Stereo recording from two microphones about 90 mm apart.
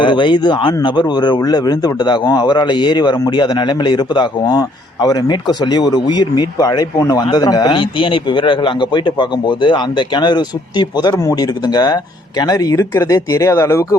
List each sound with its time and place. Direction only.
0.0 s a man's voice: 60° left (ahead or behind); by 13.8 s 30° left (ahead or behind)